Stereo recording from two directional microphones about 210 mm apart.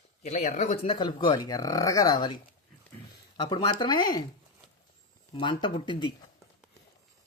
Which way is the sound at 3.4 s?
20° left (ahead or behind).